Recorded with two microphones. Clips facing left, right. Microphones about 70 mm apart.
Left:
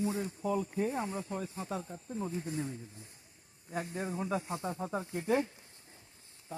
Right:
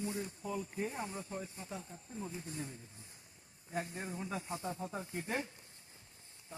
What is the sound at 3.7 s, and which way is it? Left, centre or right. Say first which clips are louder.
Speech: left 3 dB; left.